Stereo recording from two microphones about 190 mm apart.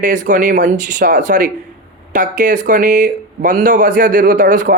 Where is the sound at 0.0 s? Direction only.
40° right (ahead or behind).